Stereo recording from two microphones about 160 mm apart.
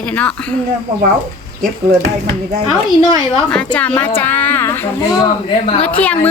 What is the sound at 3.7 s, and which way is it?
A woman's voice, 10° left (ahead or behind).